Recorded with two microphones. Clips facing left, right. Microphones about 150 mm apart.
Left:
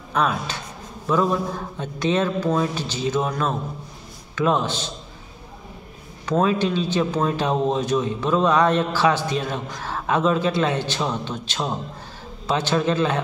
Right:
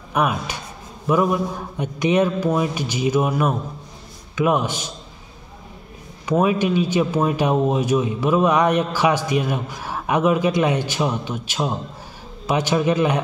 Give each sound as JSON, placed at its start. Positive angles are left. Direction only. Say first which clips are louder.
{"t": 0.1, "sound": "a man's voice", "louder": "right 1 dB", "side_deg": -15}
{"t": 6.2, "sound": "a man's voice", "louder": "right 2 dB", "side_deg": -10}